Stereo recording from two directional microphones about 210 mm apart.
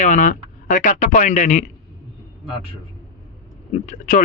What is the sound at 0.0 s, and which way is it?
Speech, 40° left (ahead or behind).